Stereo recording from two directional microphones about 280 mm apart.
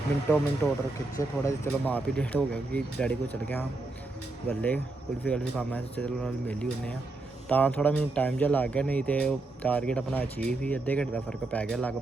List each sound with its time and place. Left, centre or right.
0.3 s speech: centre